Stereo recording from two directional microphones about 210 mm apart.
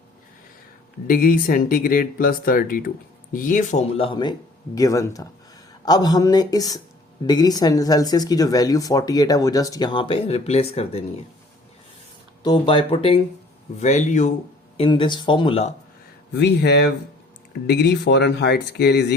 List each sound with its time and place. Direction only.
1.0 s speech: 45° left (ahead or behind)
12.4 s speech: 20° left (ahead or behind)
14.8 s speech: 25° left (ahead or behind)
16.3 s speech: 50° left (ahead or behind)